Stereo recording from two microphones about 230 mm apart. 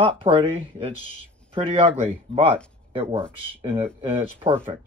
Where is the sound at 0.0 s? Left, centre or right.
Right.